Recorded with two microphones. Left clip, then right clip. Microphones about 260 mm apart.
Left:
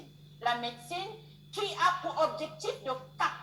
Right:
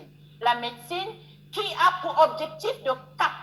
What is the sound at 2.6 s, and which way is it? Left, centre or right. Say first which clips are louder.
Speech: right 10 dB; right.